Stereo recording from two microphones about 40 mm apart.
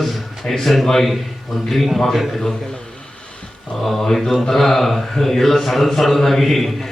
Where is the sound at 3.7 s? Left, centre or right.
Centre.